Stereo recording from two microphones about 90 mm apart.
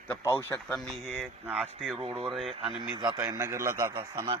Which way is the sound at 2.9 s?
50° right (ahead or behind).